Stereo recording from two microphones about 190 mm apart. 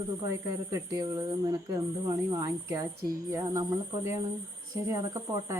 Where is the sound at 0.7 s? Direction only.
20° right (ahead or behind).